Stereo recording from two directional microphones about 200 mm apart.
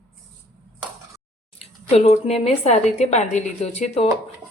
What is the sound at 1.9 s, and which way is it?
A woman's voice, 35° left (ahead or behind).